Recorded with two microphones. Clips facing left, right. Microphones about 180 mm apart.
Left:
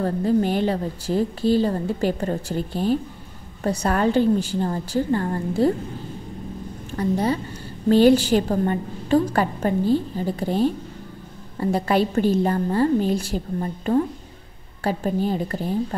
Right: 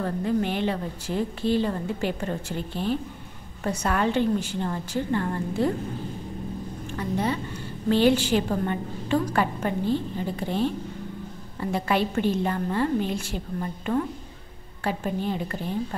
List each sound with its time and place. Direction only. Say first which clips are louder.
0.0 s a woman's voice: left 5 dB; 35° left (ahead or behind)
7.0 s a woman's voice: left 5 dB; 35° left (ahead or behind)